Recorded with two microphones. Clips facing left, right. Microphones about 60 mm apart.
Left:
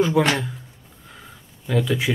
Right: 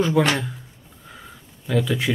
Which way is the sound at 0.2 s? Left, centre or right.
Centre.